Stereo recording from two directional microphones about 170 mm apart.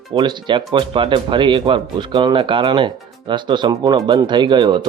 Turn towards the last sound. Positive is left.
turn(degrees=-25)  # may be behind; listen again after turning